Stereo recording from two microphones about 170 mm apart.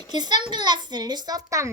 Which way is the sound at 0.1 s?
25° right (ahead or behind).